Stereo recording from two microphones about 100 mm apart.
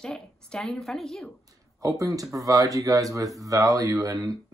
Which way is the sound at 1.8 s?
35° right (ahead or behind).